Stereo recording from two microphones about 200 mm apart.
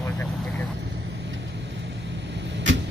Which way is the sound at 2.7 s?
70° right (ahead or behind).